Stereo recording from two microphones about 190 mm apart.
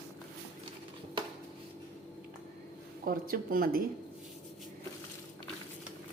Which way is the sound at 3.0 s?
50° right (ahead or behind).